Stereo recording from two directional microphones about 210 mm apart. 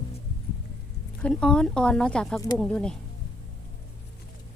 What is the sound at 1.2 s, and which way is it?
Speech, 5° left (ahead or behind).